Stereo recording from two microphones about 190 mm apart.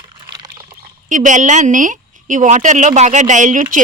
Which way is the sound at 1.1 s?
40° right (ahead or behind).